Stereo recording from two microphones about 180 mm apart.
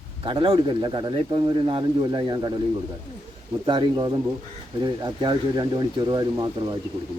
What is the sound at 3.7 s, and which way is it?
Speech, 25° right (ahead or behind).